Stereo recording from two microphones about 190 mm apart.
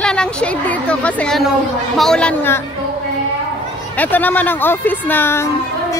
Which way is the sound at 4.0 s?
10° left (ahead or behind).